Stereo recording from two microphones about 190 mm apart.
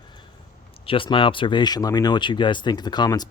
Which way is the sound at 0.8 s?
25° left (ahead or behind).